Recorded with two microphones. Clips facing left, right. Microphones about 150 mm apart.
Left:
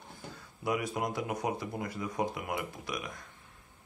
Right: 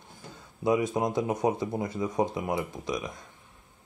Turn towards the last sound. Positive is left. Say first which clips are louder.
# right 6 dB
turn(degrees=-20)  # may be behind; listen again after turning